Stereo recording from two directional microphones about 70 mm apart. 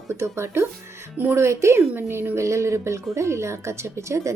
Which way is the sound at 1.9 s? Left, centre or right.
Right.